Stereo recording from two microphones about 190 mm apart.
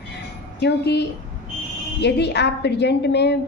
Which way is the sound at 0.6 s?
65° left (ahead or behind).